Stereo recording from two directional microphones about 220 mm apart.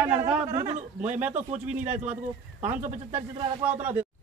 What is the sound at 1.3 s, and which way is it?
Speech, 30° right (ahead or behind).